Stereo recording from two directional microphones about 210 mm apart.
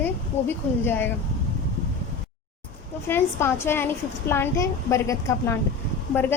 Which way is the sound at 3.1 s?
10° left (ahead or behind).